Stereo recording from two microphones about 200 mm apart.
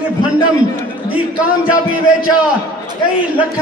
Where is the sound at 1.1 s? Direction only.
5° right (ahead or behind).